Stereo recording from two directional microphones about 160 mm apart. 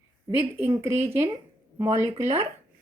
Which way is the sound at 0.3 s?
15° right (ahead or behind).